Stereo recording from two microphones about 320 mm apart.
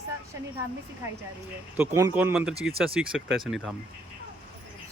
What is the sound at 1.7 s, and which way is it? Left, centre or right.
Speech, centre.